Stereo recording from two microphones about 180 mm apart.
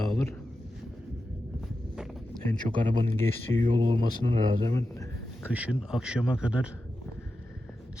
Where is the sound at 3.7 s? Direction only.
25° right (ahead or behind).